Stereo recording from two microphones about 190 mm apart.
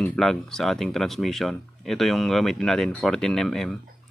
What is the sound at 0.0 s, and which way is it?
Speech, 5° left (ahead or behind).